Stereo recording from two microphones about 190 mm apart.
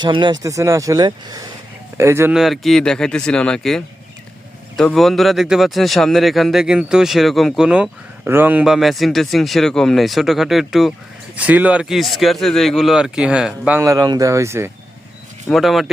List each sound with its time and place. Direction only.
0.0 s speech: 25° right (ahead or behind)
15.4 s speech: centre (ahead or behind)